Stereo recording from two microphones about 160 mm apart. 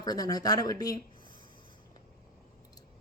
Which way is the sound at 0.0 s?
25° left (ahead or behind).